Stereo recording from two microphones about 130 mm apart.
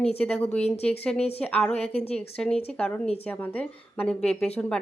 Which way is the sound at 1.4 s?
5° left (ahead or behind).